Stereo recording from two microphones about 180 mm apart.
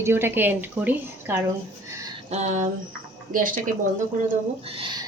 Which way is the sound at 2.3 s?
40° right (ahead or behind).